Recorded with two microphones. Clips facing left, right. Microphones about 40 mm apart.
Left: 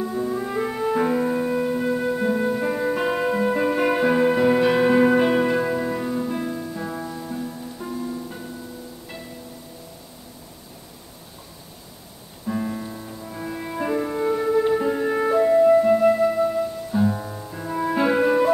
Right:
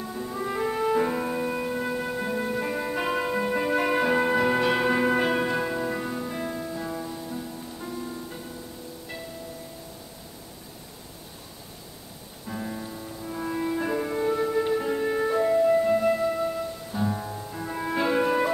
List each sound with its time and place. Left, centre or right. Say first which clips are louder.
0.0 s music: left 6 dB; centre
6.8 s music: left 3 dB; centre
7.8 s music: left 6 dB; centre
12.4 s music: left 7 dB; centre